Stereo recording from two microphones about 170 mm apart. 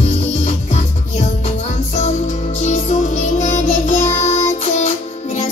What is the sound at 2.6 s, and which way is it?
Music, 45° left (ahead or behind).